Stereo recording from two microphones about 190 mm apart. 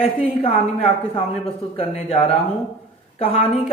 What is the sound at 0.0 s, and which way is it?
A woman's voice, 30° left (ahead or behind).